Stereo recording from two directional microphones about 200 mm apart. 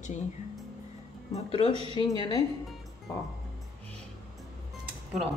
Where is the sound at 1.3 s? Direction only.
30° left (ahead or behind).